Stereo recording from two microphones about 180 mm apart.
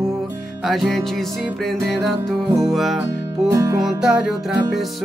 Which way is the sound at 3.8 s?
5° right (ahead or behind).